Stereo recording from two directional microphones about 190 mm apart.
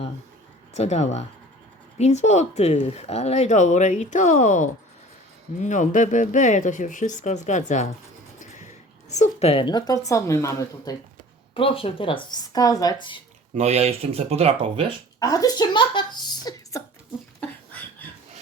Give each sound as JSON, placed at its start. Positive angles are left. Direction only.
{"t": 0.7, "sound": "a woman's voice", "side_deg": 35}
{"t": 11.5, "sound": "speech", "side_deg": 30}
{"t": 13.5, "sound": "speech", "side_deg": -35}
{"t": 15.2, "sound": "speech", "side_deg": 20}